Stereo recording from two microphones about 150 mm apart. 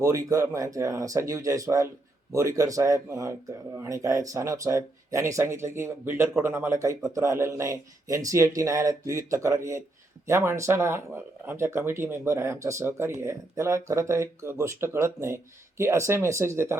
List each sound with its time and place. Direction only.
0.0 s speech: 20° right (ahead or behind)